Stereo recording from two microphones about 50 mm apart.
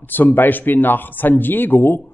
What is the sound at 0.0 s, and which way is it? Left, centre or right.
Speech, left.